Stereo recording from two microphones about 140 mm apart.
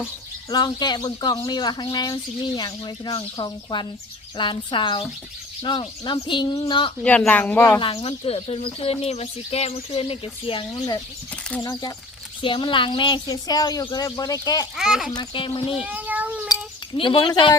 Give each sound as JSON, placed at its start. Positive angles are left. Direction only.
{"t": 0.5, "sound": "speech", "side_deg": 30}
{"t": 7.0, "sound": "speech", "side_deg": 10}
{"t": 7.8, "sound": "speech", "side_deg": 40}
{"t": 12.4, "sound": "speech", "side_deg": 35}
{"t": 14.8, "sound": "speech", "side_deg": -5}
{"t": 15.1, "sound": "speech", "side_deg": 35}
{"t": 15.7, "sound": "speech", "side_deg": -10}
{"t": 16.5, "sound": "a sound", "side_deg": 35}